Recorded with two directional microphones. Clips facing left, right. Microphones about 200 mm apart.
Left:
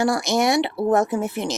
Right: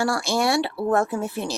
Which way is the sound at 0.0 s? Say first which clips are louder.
Left 3 dB; 20° left (ahead or behind).